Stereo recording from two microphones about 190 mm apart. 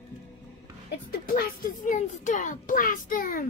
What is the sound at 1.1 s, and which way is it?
A child's voice, 50° left (ahead or behind).